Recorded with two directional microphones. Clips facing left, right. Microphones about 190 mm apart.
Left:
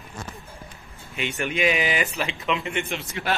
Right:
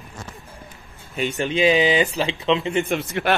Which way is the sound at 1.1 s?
35° right (ahead or behind).